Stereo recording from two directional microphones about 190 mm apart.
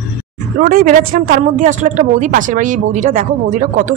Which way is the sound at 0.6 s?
45° right (ahead or behind).